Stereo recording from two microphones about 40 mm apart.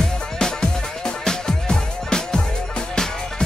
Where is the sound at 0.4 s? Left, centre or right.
Centre.